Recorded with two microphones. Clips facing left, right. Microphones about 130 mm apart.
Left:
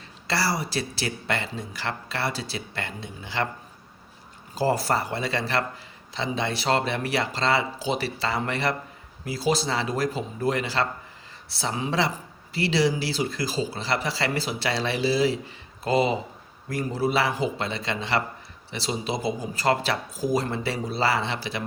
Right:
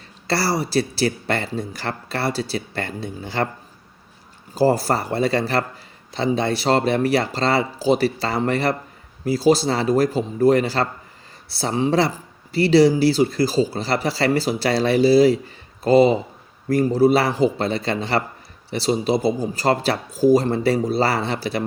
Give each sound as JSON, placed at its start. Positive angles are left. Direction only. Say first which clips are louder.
{"t": 0.3, "sound": "speech", "louder": "right 5 dB", "side_deg": -40}
{"t": 4.5, "sound": "speech", "louder": "right 5 dB", "side_deg": -40}